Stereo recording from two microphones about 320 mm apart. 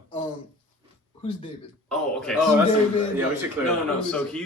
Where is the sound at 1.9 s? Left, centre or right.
Centre.